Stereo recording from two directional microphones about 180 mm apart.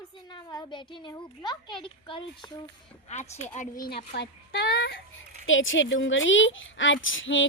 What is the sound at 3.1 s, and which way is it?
A child's voice, 40° left (ahead or behind).